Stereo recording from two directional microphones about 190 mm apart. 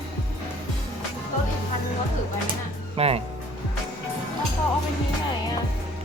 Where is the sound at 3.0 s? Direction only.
35° right (ahead or behind).